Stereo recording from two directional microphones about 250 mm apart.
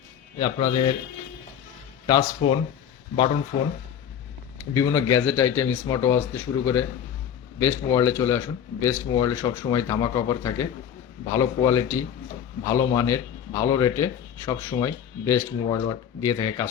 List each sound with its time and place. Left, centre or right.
0.3 s a man's voice: centre
2.0 s speech: centre
3.5 s speech: left
4.7 s a man's voice: centre